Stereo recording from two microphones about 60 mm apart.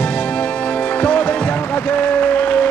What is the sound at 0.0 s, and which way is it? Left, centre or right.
Music, left.